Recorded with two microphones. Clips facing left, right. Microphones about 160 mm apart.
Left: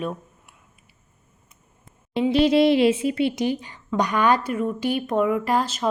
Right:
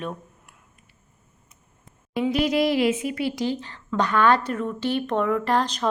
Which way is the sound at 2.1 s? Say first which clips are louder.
Left 4 dB; 25° left (ahead or behind).